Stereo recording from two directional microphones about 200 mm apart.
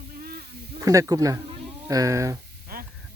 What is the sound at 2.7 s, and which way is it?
Hiss, 50° right (ahead or behind).